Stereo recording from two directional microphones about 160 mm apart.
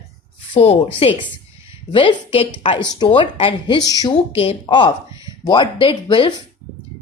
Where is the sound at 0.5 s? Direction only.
40° left (ahead or behind).